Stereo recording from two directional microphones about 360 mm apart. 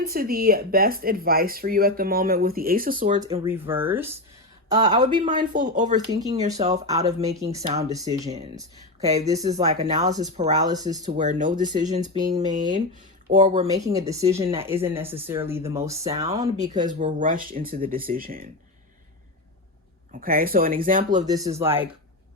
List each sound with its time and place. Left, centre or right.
0.0 s speech: right
3.2 s speech: centre
6.1 s speech: centre
16.8 s speech: right
20.1 s speech: right
21.2 s speech: centre